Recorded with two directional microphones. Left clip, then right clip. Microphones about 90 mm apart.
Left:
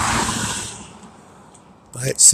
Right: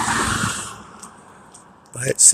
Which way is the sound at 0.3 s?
40° right (ahead or behind).